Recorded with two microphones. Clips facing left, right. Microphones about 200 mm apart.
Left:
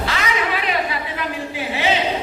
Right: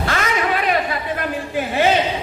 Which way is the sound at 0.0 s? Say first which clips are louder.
Right 2 dB; 50° right (ahead or behind).